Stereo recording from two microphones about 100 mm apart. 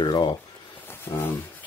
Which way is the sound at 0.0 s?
50° left (ahead or behind).